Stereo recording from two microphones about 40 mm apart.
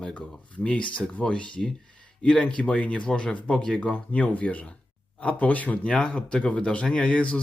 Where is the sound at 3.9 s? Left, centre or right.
Left.